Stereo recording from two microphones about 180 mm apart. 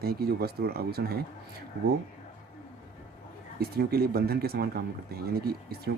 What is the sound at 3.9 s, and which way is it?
Speech, 60° right (ahead or behind).